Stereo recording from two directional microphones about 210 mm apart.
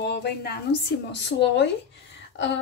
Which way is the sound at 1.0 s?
55° left (ahead or behind).